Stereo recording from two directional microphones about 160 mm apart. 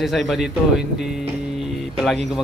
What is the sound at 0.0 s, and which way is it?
Speech, centre (ahead or behind).